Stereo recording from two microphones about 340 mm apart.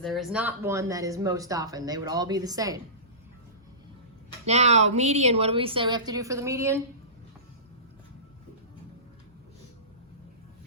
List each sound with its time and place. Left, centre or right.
0.0 s speech: centre
4.4 s speech: centre